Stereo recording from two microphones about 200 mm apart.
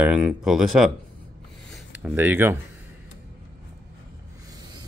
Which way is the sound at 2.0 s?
10° right (ahead or behind).